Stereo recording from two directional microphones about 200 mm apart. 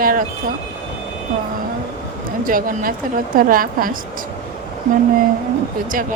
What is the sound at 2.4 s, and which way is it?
Speech, 45° right (ahead or behind).